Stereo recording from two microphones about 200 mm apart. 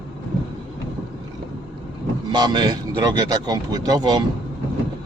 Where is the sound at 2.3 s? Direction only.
20° right (ahead or behind).